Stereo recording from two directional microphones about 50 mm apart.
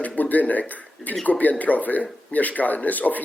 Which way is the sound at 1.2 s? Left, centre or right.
Left.